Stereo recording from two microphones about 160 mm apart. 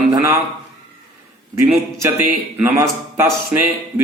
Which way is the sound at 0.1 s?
20° right (ahead or behind).